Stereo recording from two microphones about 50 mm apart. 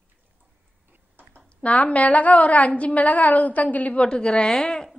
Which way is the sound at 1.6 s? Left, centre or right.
Left.